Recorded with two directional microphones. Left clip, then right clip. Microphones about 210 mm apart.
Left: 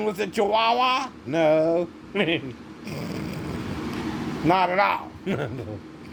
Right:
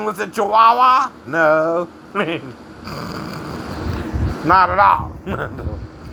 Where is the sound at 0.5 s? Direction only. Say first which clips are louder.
Right 11 dB; 15° left (ahead or behind).